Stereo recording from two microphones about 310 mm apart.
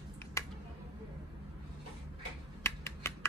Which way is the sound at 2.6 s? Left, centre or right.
Centre.